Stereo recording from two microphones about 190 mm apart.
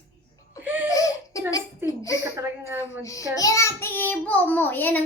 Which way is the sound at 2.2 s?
15° right (ahead or behind).